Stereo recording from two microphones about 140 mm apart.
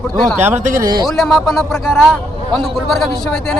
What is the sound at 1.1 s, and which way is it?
A man's voice, centre (ahead or behind).